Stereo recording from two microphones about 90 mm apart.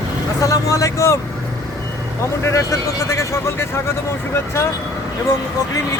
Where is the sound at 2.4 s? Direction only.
35° left (ahead or behind).